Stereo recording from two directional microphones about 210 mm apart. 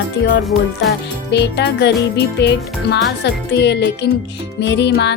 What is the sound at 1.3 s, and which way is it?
Music, 55° left (ahead or behind).